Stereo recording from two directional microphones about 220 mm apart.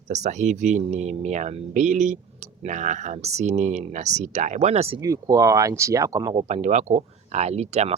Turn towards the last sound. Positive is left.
turn(degrees=-30)  # may be behind; listen again after turning